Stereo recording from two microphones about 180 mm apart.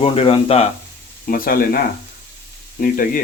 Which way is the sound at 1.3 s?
55° left (ahead or behind).